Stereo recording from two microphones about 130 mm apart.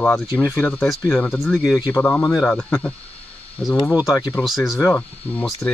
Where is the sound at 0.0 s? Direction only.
Centre (ahead or behind).